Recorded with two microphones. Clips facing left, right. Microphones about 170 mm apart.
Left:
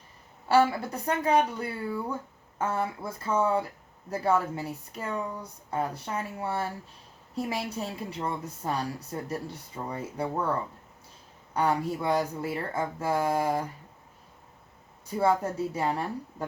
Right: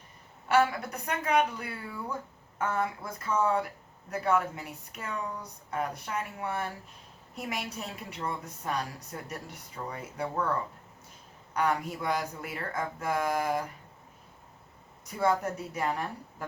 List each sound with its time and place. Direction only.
0.4 s a woman's voice: 30° left (ahead or behind)
11.5 s speech: 30° left (ahead or behind)
15.0 s speech: 30° left (ahead or behind)